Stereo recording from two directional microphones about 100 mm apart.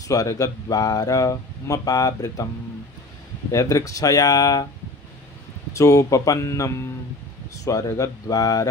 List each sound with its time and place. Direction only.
0.1 s speech: 35° left (ahead or behind)
3.5 s speech: 35° left (ahead or behind)
5.7 s speech: 30° left (ahead or behind)